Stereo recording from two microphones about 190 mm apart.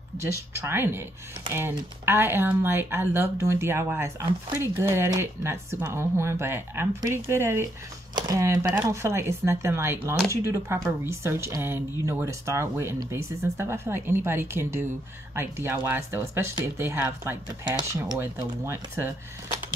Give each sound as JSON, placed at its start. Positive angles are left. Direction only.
{"t": 0.2, "sound": "speech", "side_deg": -15}